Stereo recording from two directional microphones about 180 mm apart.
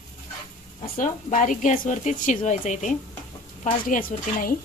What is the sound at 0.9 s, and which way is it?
Speech, 45° left (ahead or behind).